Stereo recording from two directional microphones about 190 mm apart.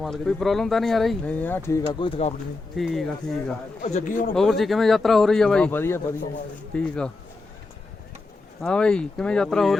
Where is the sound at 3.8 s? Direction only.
40° left (ahead or behind).